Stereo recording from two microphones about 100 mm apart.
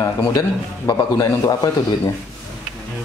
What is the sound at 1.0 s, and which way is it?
Speech, 30° left (ahead or behind).